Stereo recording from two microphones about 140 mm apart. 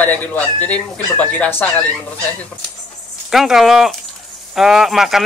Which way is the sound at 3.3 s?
Centre (ahead or behind).